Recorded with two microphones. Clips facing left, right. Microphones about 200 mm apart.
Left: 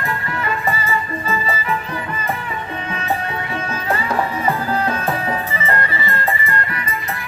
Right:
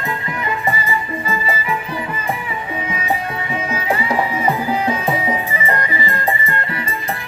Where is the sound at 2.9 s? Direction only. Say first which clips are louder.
Even; 10° right (ahead or behind).